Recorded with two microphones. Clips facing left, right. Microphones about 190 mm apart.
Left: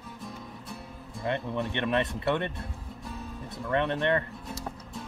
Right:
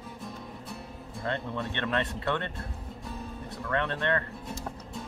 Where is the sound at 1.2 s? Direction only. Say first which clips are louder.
Left 3 dB; 15° left (ahead or behind).